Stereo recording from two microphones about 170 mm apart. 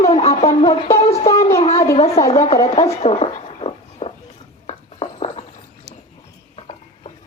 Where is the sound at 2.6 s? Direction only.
40° left (ahead or behind).